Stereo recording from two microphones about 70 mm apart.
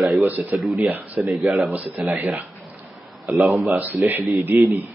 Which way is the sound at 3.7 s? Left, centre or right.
Right.